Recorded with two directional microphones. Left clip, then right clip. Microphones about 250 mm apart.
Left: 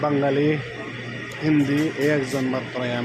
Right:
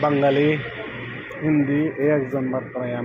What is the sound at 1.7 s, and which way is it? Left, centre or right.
Speech, centre.